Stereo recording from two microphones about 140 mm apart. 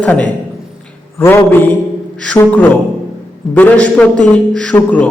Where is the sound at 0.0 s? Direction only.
10° left (ahead or behind).